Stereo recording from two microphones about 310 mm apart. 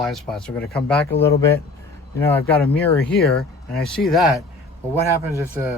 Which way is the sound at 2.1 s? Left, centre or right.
Centre.